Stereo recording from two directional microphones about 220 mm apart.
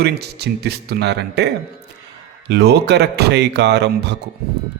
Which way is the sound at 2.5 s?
50° right (ahead or behind).